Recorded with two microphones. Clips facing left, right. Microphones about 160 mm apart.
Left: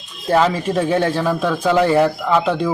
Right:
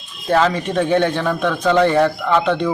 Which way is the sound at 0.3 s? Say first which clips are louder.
Left 1 dB; 5° left (ahead or behind).